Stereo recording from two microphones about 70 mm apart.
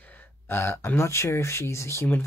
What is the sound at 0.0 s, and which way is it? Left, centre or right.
Speech, left.